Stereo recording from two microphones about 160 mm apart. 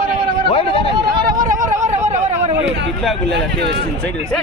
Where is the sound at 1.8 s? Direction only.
45° right (ahead or behind).